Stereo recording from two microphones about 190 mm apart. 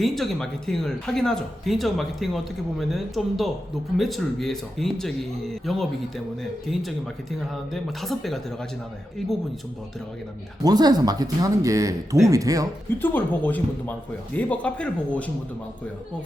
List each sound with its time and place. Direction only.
0.0 s speech: centre (ahead or behind)
10.6 s speech: 20° right (ahead or behind)
13.0 s speech: 10° left (ahead or behind)